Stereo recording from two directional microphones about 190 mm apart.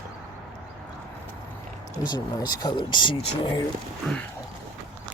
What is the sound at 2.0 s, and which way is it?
Speech, 20° left (ahead or behind).